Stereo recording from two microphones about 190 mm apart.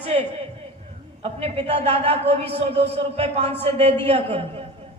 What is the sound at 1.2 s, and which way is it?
A man's voice, 30° right (ahead or behind).